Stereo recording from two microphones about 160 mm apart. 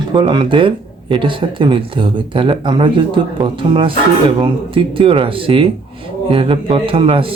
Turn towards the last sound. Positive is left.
turn(degrees=-35)  # may be behind; listen again after turning